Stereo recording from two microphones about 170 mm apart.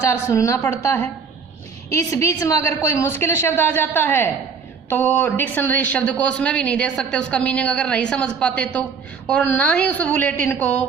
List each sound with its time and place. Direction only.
0.1 s speech: 20° left (ahead or behind)
2.0 s speech: 20° left (ahead or behind)